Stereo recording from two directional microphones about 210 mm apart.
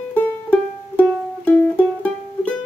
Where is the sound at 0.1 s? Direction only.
10° left (ahead or behind).